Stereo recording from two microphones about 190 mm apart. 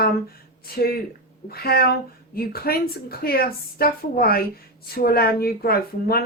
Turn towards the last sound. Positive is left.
turn(degrees=55)  # may be behind; listen again after turning